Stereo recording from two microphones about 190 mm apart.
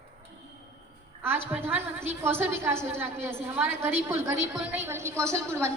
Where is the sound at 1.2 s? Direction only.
10° right (ahead or behind).